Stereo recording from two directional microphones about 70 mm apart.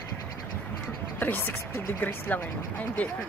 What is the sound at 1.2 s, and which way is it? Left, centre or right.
Speech, left.